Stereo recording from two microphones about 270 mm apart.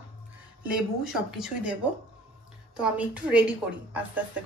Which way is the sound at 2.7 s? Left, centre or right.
Centre.